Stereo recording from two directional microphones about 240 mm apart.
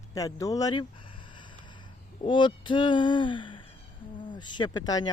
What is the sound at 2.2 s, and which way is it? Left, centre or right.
Speech, centre.